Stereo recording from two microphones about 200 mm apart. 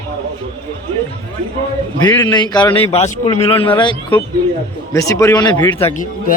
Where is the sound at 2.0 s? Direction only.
20° left (ahead or behind).